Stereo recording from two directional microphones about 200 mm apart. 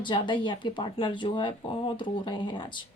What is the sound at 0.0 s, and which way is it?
Speech, 25° left (ahead or behind).